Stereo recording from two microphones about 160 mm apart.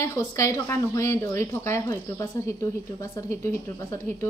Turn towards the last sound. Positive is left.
turn(degrees=15)  # may be behind; listen again after turning